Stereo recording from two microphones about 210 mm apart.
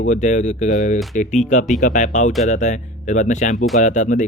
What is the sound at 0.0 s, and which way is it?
Speech, 35° left (ahead or behind).